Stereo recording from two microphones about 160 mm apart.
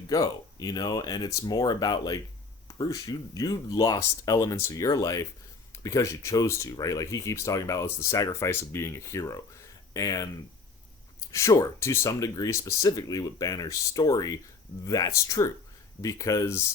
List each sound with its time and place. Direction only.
0.1 s speech: 20° left (ahead or behind)
11.3 s speech: 20° left (ahead or behind)